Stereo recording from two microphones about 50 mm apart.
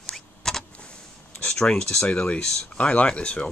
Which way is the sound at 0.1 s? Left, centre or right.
Centre.